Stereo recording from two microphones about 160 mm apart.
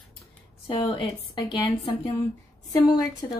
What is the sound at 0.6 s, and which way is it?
A woman's voice, 35° left (ahead or behind).